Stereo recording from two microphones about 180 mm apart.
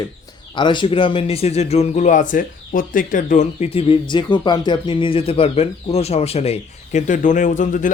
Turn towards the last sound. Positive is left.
turn(degrees=45)  # may be behind; listen again after turning